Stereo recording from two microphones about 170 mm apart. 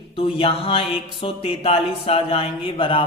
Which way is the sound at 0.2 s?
35° left (ahead or behind).